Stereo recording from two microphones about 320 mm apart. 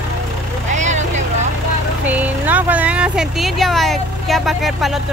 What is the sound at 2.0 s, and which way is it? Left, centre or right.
Speech, centre.